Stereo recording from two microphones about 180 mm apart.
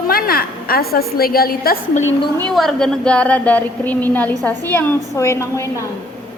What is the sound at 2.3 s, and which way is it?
A woman's voice, 5° left (ahead or behind).